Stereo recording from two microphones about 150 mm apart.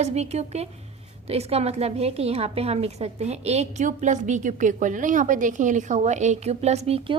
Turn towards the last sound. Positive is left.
turn(degrees=-40)  # may be behind; listen again after turning